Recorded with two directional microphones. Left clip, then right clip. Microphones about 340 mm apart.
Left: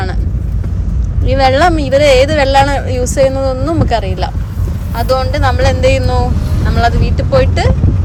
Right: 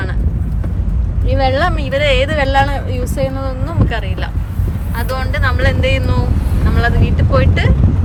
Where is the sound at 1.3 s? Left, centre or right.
Left.